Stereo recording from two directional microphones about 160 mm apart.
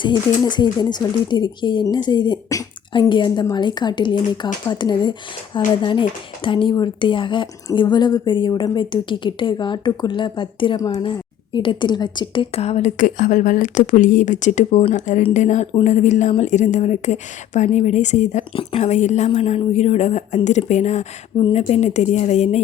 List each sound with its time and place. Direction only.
0.0 s a woman's voice: 30° left (ahead or behind); by 22.6 s 45° left (ahead or behind)